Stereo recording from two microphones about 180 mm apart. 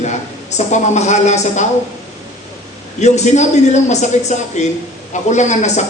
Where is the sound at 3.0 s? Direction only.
40° left (ahead or behind).